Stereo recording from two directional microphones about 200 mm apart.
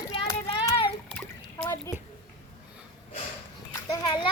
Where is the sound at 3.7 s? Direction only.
20° left (ahead or behind).